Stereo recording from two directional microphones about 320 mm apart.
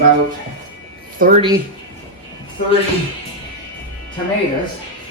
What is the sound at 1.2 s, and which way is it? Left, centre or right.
Speech, right.